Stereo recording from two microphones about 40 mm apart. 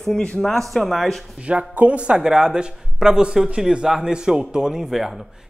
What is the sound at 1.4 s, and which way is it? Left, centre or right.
Speech, right.